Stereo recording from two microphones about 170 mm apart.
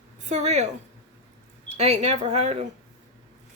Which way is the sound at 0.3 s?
40° right (ahead or behind).